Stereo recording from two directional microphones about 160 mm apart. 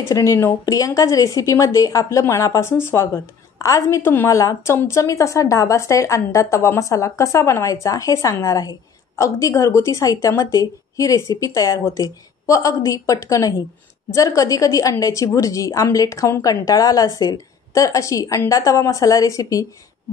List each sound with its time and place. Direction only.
0.1 s a woman's voice: 20° left (ahead or behind)